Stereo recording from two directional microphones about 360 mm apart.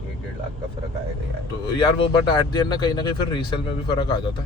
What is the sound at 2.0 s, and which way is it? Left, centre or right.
Speech, centre.